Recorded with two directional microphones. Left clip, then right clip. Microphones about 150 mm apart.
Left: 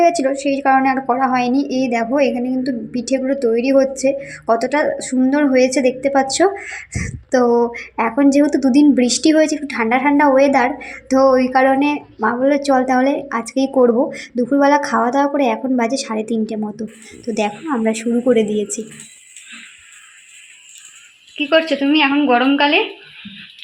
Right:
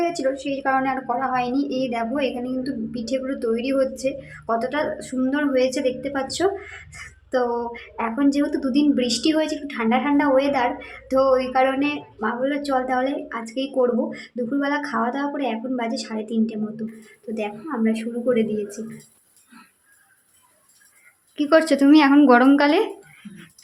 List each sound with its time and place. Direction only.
0.0 s a woman's voice: 30° left (ahead or behind)
21.3 s a woman's voice: 15° right (ahead or behind)